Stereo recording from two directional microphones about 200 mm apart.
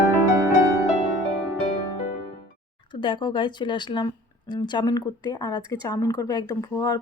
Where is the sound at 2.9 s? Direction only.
25° left (ahead or behind).